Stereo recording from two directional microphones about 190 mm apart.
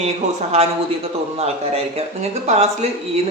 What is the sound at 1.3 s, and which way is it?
Speech, 35° right (ahead or behind).